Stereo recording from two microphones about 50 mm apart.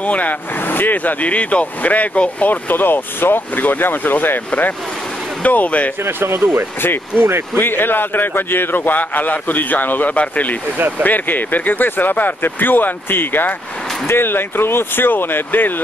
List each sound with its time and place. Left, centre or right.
0.0 s speech: left
0.7 s speech: left
6.0 s speech: right
7.5 s speech: left